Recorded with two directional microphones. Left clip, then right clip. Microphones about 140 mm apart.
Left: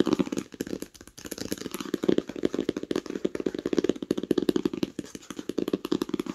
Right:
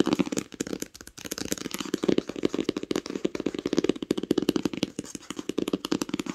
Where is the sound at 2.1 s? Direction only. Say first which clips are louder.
Right 1 dB; 15° right (ahead or behind).